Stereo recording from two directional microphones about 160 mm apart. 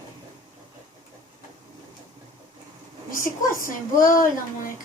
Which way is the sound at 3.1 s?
60° left (ahead or behind).